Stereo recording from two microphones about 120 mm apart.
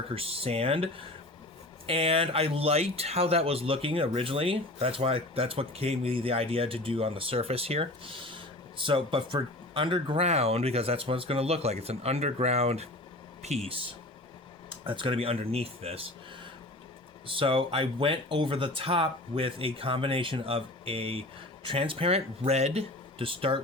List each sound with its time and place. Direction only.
0.1 s speech: 50° right (ahead or behind)
10.2 s speech: 60° right (ahead or behind)
17.2 s speech: 45° right (ahead or behind)